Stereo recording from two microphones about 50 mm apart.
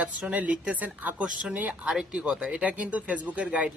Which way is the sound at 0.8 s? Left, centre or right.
Right.